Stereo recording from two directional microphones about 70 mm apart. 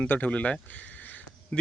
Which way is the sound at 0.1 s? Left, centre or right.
Left.